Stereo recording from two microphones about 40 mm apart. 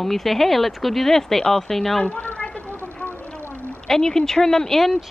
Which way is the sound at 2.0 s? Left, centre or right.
Left.